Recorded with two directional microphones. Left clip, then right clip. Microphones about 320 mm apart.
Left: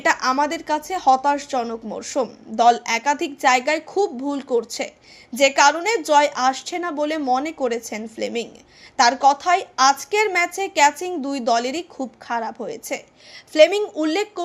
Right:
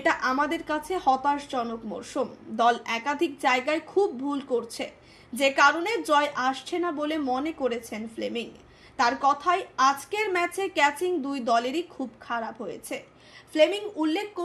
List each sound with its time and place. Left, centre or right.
0.0 s a woman's voice: left